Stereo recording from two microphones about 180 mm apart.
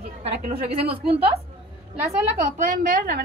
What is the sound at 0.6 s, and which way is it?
Speech, 30° right (ahead or behind).